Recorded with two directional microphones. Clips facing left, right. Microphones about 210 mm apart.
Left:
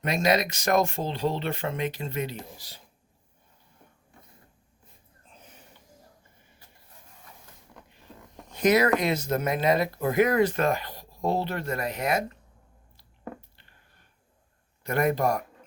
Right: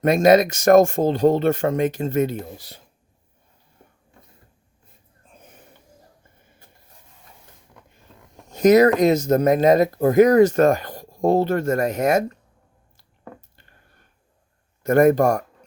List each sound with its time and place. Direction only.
0.0 s speech: 50° right (ahead or behind)
8.4 s speech: 40° right (ahead or behind)
14.8 s speech: 45° right (ahead or behind)